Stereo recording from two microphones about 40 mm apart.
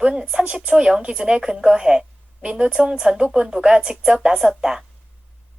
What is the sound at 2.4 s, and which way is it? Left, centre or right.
A woman's voice, right.